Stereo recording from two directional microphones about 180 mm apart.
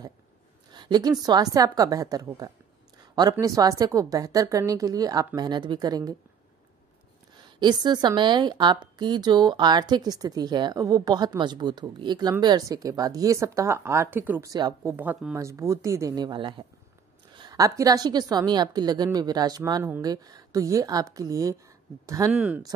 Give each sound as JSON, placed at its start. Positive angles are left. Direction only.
{"t": 0.7, "sound": "a sound", "side_deg": -25}
{"t": 1.2, "sound": "a woman's voice", "side_deg": -20}
{"t": 7.6, "sound": "a woman's voice", "side_deg": -25}
{"t": 22.3, "sound": "speech", "side_deg": -5}